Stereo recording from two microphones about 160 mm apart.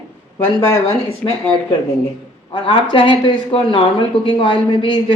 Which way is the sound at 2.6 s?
35° left (ahead or behind).